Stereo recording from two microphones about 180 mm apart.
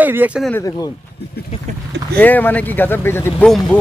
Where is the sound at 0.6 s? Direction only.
20° left (ahead or behind).